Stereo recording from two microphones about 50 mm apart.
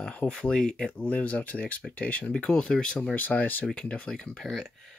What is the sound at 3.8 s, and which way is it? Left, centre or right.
Speech, left.